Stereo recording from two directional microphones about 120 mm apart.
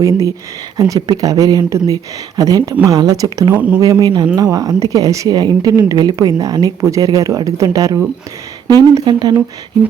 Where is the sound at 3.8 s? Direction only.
35° right (ahead or behind).